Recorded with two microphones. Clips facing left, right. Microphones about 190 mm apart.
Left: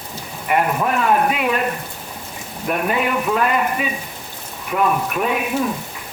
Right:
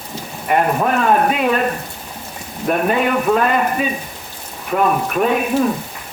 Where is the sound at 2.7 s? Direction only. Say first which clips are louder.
Right 4 dB; 40° right (ahead or behind).